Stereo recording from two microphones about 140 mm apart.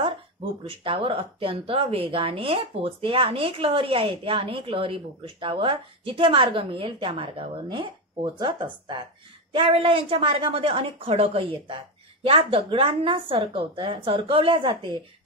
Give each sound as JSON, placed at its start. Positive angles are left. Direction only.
{"t": 0.7, "sound": "speech", "side_deg": -40}